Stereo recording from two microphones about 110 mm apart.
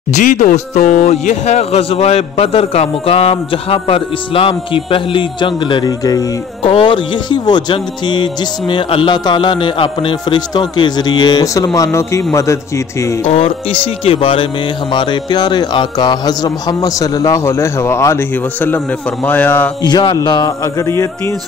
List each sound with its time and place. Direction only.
0.1 s speech: 90° left; by 6.2 s 35° left (ahead or behind)
6.6 s speech: 55° left (ahead or behind); by 13.1 s 25° left (ahead or behind)
13.3 s a man's voice: 65° left (ahead or behind); by 19.7 s 15° left (ahead or behind)
19.8 s speech: 40° left (ahead or behind)